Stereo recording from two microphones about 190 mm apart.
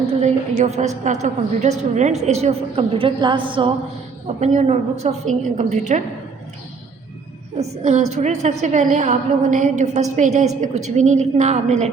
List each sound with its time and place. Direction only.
0.2 s a woman's voice: 35° right (ahead or behind)
7.9 s a woman's voice: 40° right (ahead or behind)